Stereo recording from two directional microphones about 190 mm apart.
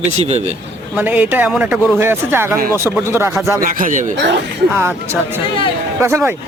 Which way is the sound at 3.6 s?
45° right (ahead or behind).